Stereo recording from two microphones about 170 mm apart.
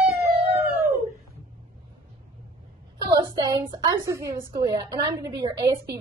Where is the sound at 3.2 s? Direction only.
25° right (ahead or behind).